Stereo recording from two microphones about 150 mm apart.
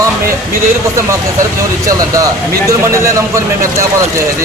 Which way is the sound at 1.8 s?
25° right (ahead or behind).